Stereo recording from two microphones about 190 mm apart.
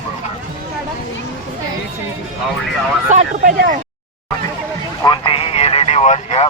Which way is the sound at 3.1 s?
45° right (ahead or behind).